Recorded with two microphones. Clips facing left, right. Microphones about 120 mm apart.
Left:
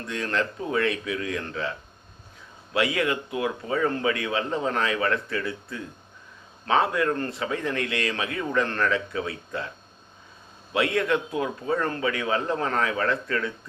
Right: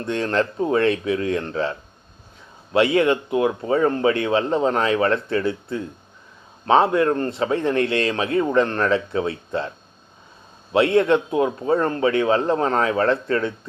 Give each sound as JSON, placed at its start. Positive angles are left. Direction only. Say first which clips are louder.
{"t": 0.0, "sound": "speech", "louder": "right 6 dB", "side_deg": -30}
{"t": 2.7, "sound": "speech", "louder": "right 7 dB", "side_deg": -30}
{"t": 10.7, "sound": "speech", "louder": "right 7 dB", "side_deg": -30}